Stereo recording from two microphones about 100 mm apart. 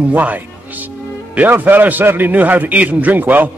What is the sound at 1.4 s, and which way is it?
A man's voice, 20° right (ahead or behind).